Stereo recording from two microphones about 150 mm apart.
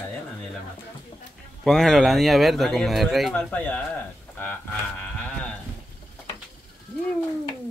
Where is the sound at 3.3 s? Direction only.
10° left (ahead or behind).